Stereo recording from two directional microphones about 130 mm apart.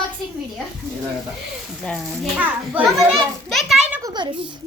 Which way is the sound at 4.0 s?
35° right (ahead or behind).